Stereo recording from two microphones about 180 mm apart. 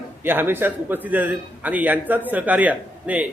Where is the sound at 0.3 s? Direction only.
10° right (ahead or behind).